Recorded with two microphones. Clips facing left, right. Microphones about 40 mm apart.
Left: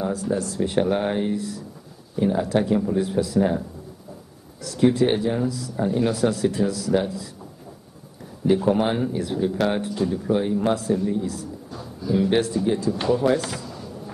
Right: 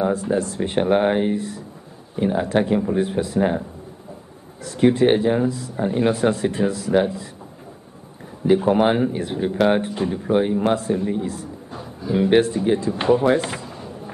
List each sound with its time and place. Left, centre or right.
0.0 s speech: right
4.6 s speech: right
8.5 s speech: right